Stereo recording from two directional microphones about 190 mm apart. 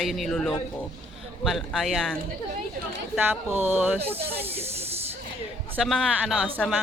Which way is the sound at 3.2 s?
10° right (ahead or behind).